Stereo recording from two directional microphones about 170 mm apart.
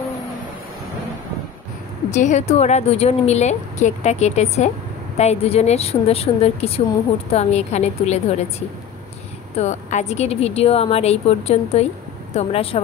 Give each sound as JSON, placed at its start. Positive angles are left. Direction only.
{"t": 2.0, "sound": "a woman's voice", "side_deg": 45}
{"t": 9.6, "sound": "a woman's voice", "side_deg": 45}